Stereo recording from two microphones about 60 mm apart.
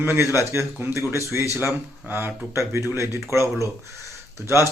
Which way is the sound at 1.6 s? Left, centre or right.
Right.